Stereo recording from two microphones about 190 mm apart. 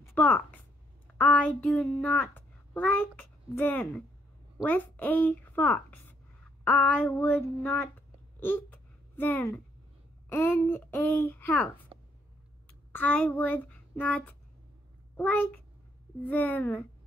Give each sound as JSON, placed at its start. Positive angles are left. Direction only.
{"t": 0.0, "sound": "a woman's voice", "side_deg": 10}
{"t": 8.4, "sound": "hiccup", "side_deg": 10}
{"t": 9.1, "sound": "a woman's voice", "side_deg": 10}
{"t": 12.9, "sound": "child singing", "side_deg": 10}
{"t": 15.1, "sound": "speech", "side_deg": 10}